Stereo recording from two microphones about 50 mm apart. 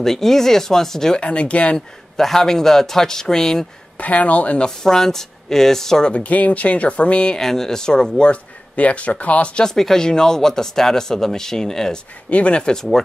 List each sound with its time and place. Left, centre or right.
0.0 s speech: centre
1.2 s speech: left
2.1 s speech: centre
4.0 s speech: left
4.6 s speech: centre
6.1 s speech: left
7.3 s speech: centre
8.7 s speech: left
9.7 s speech: centre
12.3 s speech: left